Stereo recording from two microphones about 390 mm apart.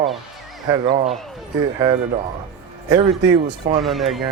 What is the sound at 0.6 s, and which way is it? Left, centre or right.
Speech, centre.